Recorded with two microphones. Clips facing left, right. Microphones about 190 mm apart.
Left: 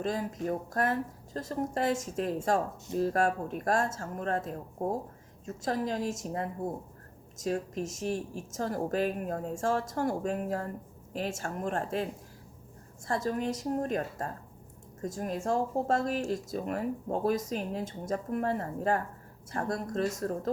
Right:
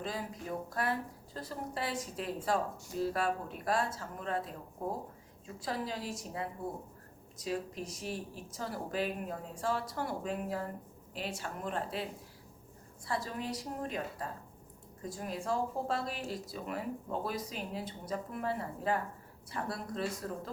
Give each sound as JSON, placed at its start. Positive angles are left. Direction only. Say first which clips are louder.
{"t": 0.0, "sound": "speech", "louder": "left 7 dB", "side_deg": 45}
{"t": 13.1, "sound": "speech", "louder": "left 6 dB", "side_deg": 45}